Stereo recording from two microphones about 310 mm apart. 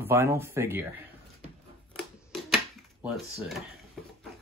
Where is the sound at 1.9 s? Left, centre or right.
Centre.